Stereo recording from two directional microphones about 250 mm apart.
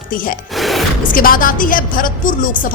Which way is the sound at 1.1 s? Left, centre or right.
Left.